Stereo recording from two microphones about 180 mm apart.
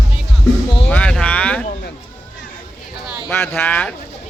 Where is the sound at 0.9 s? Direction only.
5° left (ahead or behind).